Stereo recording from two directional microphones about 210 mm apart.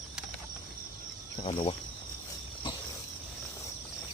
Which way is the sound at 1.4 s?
25° left (ahead or behind).